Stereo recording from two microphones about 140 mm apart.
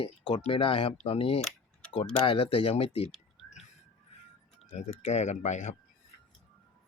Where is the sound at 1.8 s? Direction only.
5° left (ahead or behind).